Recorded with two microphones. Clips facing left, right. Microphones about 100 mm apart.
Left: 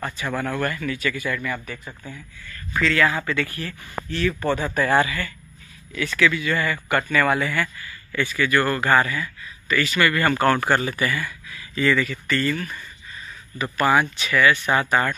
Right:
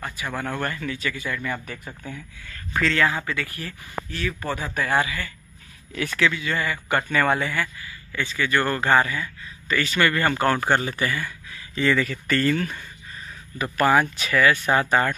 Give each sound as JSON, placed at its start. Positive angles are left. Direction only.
{"t": 0.2, "sound": "speech", "side_deg": -15}
{"t": 2.7, "sound": "speech", "side_deg": -30}
{"t": 5.9, "sound": "speech", "side_deg": -40}
{"t": 6.2, "sound": "speech", "side_deg": -20}
{"t": 7.1, "sound": "speech", "side_deg": -30}
{"t": 10.3, "sound": "speech", "side_deg": -15}
{"t": 13.9, "sound": "speech", "side_deg": -40}